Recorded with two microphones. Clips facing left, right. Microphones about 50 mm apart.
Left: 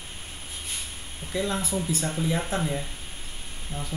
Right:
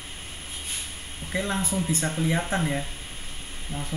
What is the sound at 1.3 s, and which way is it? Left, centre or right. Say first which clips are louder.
Speech: even; right.